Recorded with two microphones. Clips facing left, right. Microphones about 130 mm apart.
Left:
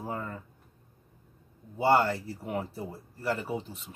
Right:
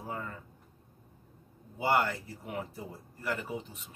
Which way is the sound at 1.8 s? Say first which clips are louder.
Left 5 dB; 30° left (ahead or behind).